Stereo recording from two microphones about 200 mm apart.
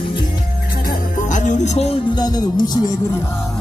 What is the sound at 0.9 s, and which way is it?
Music, 40° left (ahead or behind).